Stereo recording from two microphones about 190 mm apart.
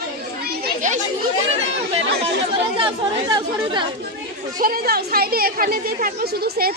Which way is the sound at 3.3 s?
20° right (ahead or behind).